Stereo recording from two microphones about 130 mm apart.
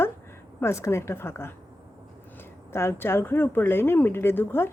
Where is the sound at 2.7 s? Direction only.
20° left (ahead or behind).